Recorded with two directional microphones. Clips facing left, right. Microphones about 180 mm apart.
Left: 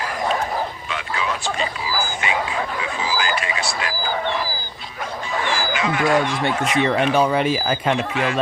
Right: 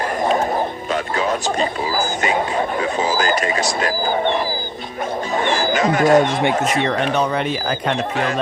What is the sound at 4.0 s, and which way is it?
Speech, 25° right (ahead or behind).